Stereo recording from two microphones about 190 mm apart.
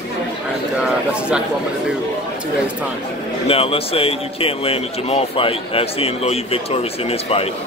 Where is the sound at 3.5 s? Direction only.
30° left (ahead or behind).